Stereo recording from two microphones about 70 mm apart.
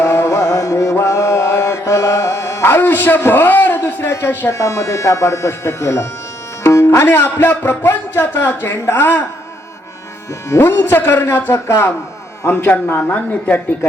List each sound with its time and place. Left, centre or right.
0.0 s music: left
4.5 s speech: left
10.6 s speech: left
12.5 s speech: left